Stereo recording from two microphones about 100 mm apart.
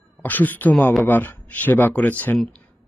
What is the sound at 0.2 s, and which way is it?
A man's voice, 15° left (ahead or behind).